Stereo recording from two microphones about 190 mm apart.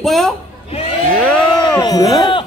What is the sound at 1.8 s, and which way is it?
Speech, 20° left (ahead or behind).